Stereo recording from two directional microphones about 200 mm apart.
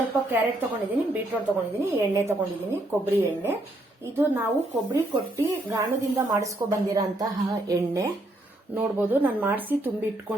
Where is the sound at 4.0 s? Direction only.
10° right (ahead or behind).